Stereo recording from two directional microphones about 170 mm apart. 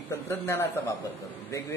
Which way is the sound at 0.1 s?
15° left (ahead or behind).